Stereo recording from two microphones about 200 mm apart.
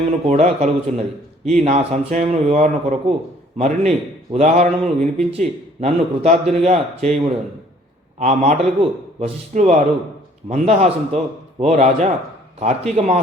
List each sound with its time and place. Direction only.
0.0 s speech: 35° right (ahead or behind)
8.2 s speech: 35° right (ahead or behind)